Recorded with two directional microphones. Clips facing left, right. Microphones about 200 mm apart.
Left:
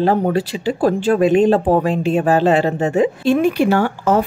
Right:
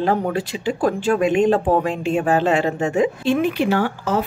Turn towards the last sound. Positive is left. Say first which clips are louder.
# left 4 dB
turn(degrees=45)  # may be behind; listen again after turning